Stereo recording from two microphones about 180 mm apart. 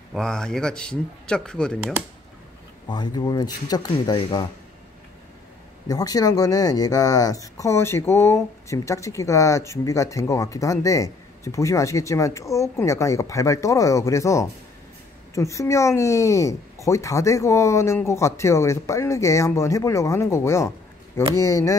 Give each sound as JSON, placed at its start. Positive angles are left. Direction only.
{"t": 0.1, "sound": "speech", "side_deg": 5}
{"t": 2.9, "sound": "speech", "side_deg": 25}
{"t": 5.9, "sound": "speech", "side_deg": 20}